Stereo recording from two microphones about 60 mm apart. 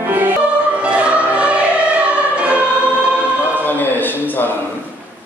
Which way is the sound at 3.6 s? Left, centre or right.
Left.